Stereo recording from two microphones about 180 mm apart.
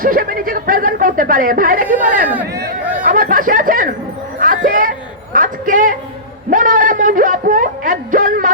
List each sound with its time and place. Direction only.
0.0 s speech: 50° right (ahead or behind)
2.3 s speech: 10° right (ahead or behind)
2.9 s speech: 50° right (ahead or behind)
4.4 s a sound: 50° right (ahead or behind)